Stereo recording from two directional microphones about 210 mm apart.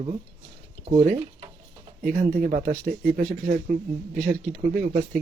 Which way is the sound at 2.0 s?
40° right (ahead or behind).